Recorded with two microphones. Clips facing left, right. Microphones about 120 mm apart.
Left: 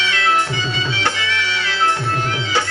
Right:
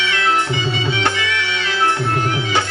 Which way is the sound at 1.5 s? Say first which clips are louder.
Right 1 dB; 20° right (ahead or behind).